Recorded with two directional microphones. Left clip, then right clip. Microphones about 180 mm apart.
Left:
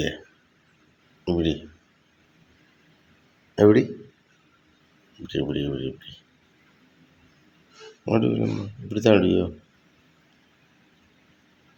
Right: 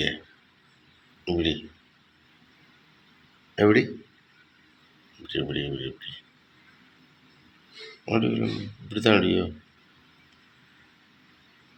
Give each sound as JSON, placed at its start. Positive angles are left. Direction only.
{"t": 1.2, "sound": "speech", "side_deg": 40}
{"t": 3.5, "sound": "speech", "side_deg": 35}
{"t": 5.2, "sound": "speech", "side_deg": 40}
{"t": 8.0, "sound": "speech", "side_deg": 40}